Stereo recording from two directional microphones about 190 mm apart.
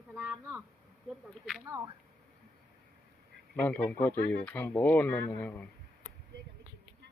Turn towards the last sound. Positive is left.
turn(degrees=10)  # may be behind; listen again after turning